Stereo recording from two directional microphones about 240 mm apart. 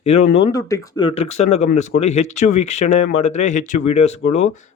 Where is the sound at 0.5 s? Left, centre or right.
Centre.